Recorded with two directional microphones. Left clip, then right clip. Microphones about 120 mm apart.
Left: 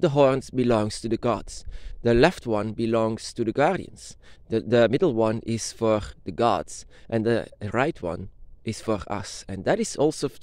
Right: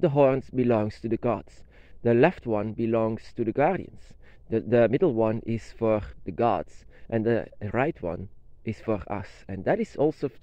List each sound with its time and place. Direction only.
0.0 s speech: 30° left (ahead or behind)